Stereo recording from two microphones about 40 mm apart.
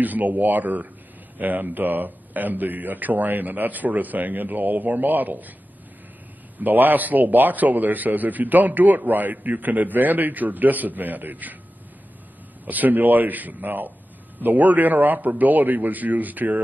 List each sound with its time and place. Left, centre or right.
0.0 s a man's voice: right
6.6 s a man's voice: right
12.6 s a man's voice: right